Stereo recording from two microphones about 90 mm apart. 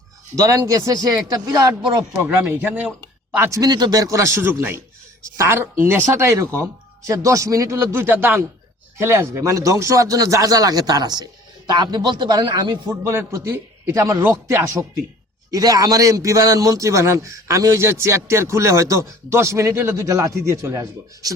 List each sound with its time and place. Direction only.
0.3 s speech: 40° right (ahead or behind)
2.3 s speech: 20° right (ahead or behind)
3.5 s speech: 45° right (ahead or behind)
12.9 s speech: 30° right (ahead or behind)